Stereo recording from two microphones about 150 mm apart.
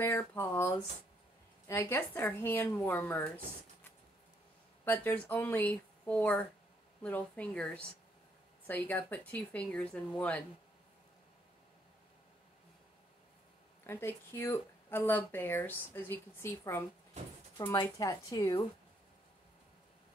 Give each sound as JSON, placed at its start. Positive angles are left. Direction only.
{"t": 0.0, "sound": "speech", "side_deg": 15}
{"t": 4.8, "sound": "speech", "side_deg": 10}
{"t": 13.8, "sound": "speech", "side_deg": 15}